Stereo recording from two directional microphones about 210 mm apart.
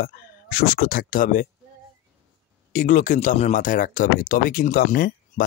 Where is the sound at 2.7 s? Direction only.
40° left (ahead or behind).